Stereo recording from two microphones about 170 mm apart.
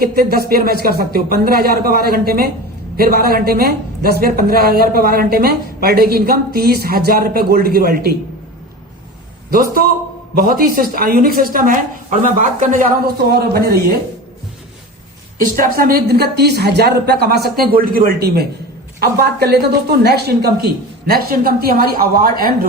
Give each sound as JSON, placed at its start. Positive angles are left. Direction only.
{"t": 0.0, "sound": "a woman's voice", "side_deg": -65}
{"t": 9.5, "sound": "a woman's voice", "side_deg": -55}
{"t": 13.3, "sound": "speech", "side_deg": -65}
{"t": 15.5, "sound": "a woman's voice", "side_deg": -55}